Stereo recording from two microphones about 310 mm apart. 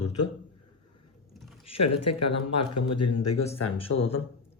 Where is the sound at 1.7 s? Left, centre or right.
Left.